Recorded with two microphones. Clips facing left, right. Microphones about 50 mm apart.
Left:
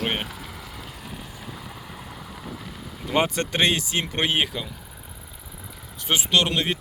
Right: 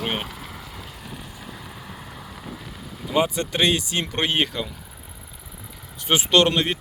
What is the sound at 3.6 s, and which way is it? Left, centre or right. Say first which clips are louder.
Speech: right 1 dB; left.